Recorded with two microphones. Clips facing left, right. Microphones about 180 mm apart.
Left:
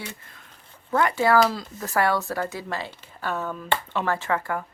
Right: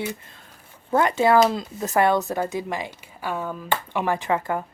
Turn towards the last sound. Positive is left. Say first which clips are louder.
# right 2 dB
turn(degrees=-20)  # may be behind; listen again after turning